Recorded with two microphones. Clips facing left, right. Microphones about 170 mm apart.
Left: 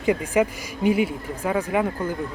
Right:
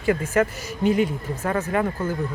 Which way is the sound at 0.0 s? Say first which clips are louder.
Even; 15° left (ahead or behind).